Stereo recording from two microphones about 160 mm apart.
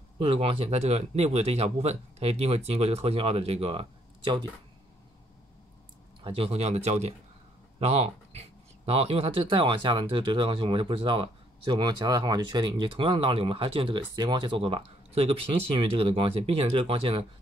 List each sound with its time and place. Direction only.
0.2 s speech: 35° right (ahead or behind)
6.2 s speech: 35° right (ahead or behind)